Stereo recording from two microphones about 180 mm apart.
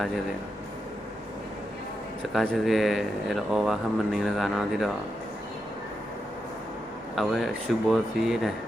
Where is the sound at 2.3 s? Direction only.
Centre (ahead or behind).